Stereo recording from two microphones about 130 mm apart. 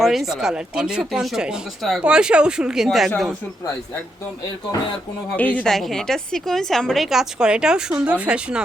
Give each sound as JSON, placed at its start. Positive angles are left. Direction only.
{"t": 0.0, "sound": "a woman's voice", "side_deg": 0}
{"t": 5.4, "sound": "a woman's voice", "side_deg": 10}